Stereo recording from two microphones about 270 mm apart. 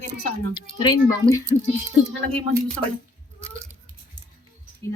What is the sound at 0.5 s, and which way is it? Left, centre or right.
Speech, centre.